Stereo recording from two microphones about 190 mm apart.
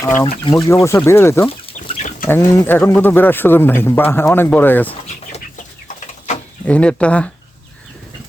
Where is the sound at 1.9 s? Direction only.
40° left (ahead or behind).